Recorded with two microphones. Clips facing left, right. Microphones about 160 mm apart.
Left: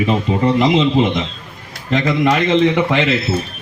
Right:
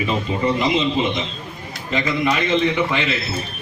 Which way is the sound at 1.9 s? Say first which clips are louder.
Left 5 dB; 70° left (ahead or behind).